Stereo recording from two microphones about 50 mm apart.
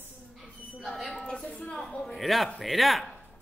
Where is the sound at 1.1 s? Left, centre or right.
Centre.